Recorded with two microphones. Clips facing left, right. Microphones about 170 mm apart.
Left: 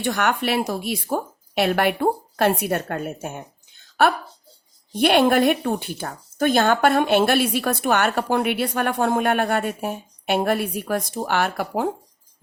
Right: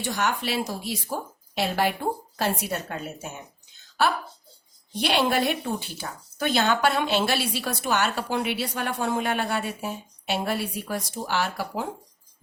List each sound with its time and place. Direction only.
0.0 s a woman's voice: 60° left (ahead or behind)